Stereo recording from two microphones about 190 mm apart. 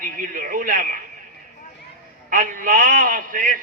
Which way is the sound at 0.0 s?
45° right (ahead or behind).